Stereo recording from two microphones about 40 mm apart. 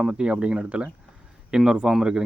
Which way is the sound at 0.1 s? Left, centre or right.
Right.